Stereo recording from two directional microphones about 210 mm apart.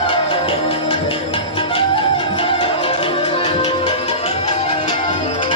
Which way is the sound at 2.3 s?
20° left (ahead or behind).